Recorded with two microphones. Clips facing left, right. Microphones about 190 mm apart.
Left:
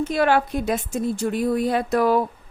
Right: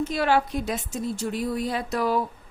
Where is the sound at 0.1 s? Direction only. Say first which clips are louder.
Left 5 dB; 55° left (ahead or behind).